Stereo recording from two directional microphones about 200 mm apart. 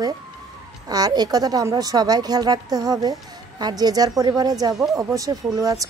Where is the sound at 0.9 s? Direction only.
20° right (ahead or behind).